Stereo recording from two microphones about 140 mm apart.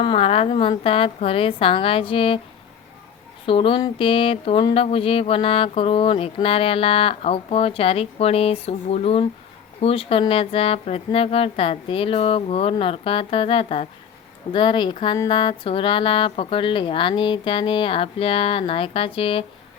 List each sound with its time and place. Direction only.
0.0 s speech: 40° left (ahead or behind)
3.4 s speech: 40° left (ahead or behind)